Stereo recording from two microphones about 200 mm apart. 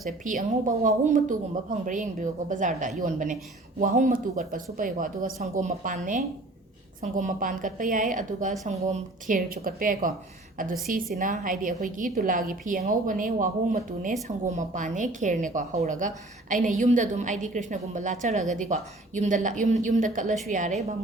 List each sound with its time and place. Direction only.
0.3 s a woman's voice: 40° right (ahead or behind)